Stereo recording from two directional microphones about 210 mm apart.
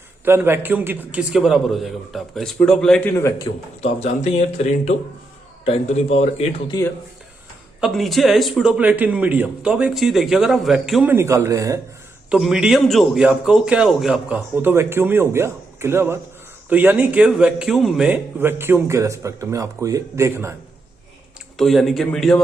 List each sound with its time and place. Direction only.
0.3 s a man's voice: 10° right (ahead or behind); by 3.4 s 15° left (ahead or behind)
3.8 s speech: 30° left (ahead or behind)
6.7 s speech: 15° left (ahead or behind)
7.8 s a man's voice: centre (ahead or behind); by 11.8 s 15° right (ahead or behind)
12.3 s a man's voice: 5° right (ahead or behind)
21.6 s a man's voice: centre (ahead or behind)